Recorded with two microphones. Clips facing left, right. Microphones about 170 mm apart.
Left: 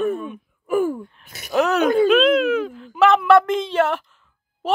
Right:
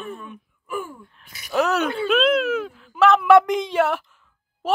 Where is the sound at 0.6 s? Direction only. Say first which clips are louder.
Left 11 dB; 45° left (ahead or behind).